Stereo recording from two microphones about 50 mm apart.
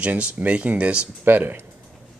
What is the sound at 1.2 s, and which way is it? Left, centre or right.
Speech, right.